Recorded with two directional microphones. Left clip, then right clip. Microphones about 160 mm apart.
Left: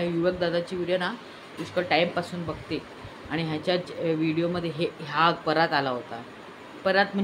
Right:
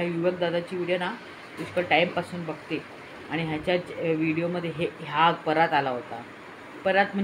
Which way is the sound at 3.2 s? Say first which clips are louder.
Even; 20° left (ahead or behind).